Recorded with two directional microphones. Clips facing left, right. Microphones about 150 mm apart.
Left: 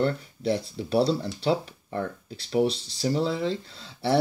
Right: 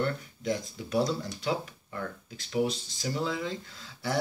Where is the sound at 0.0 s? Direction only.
30° left (ahead or behind).